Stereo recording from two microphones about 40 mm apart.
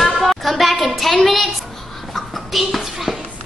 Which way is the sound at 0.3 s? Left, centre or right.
Centre.